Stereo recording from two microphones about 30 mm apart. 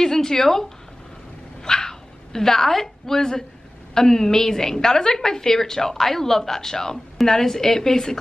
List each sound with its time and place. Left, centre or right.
0.0 s a woman's voice: centre
1.6 s dog: left
3.9 s a woman's voice: centre